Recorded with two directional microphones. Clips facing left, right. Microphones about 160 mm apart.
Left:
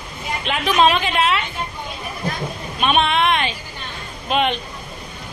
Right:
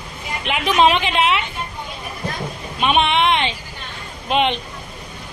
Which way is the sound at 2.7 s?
20° right (ahead or behind).